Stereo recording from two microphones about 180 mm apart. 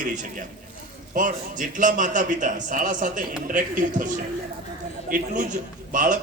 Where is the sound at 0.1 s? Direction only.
45° right (ahead or behind).